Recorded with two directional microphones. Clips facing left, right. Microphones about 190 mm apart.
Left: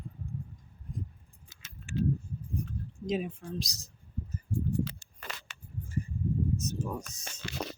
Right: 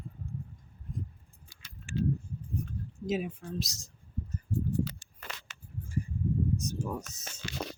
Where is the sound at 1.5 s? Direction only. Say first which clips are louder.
Left 1 dB; 20° left (ahead or behind).